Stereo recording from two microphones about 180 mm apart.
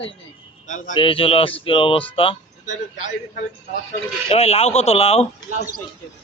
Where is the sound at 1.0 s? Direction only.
30° left (ahead or behind).